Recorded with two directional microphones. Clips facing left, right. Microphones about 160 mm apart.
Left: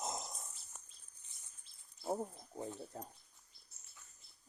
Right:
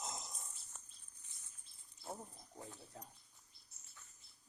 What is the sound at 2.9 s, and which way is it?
Speech, 45° left (ahead or behind).